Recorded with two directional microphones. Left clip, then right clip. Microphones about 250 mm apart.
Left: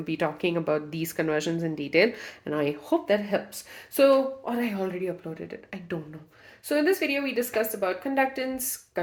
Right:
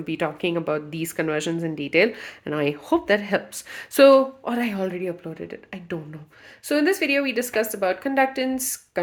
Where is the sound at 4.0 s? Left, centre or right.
Right.